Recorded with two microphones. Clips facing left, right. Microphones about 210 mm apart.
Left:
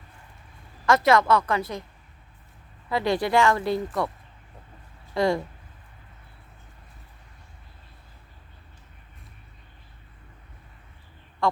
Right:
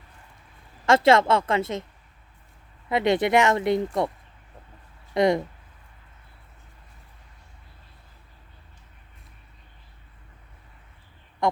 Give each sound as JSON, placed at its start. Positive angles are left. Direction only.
{"t": 0.9, "sound": "a woman's voice", "side_deg": -25}
{"t": 2.9, "sound": "a woman's voice", "side_deg": -20}
{"t": 5.1, "sound": "a woman's voice", "side_deg": -20}
{"t": 11.4, "sound": "a sound", "side_deg": -20}